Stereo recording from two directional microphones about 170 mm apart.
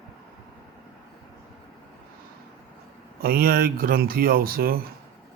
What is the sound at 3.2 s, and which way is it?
Speech, 60° right (ahead or behind).